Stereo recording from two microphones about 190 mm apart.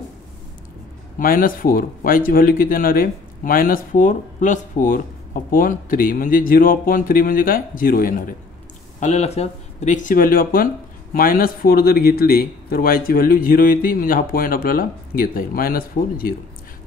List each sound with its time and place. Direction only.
1.2 s speech: 50° left (ahead or behind)
9.0 s speech: 35° left (ahead or behind)